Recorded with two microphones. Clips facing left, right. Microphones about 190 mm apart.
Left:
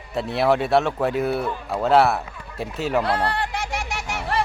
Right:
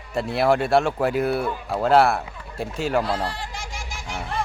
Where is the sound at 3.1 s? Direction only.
65° left (ahead or behind).